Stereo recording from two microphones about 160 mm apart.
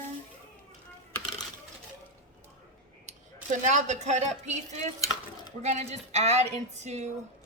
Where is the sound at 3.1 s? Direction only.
50° right (ahead or behind).